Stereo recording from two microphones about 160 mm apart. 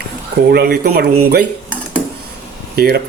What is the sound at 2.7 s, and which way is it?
Speech, 75° right (ahead or behind).